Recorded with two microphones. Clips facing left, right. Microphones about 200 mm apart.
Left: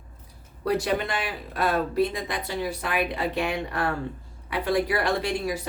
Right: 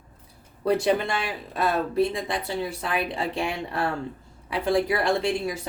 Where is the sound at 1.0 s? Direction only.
25° right (ahead or behind).